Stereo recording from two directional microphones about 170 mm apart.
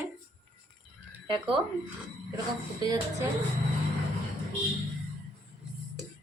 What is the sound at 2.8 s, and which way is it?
Speech, 20° right (ahead or behind).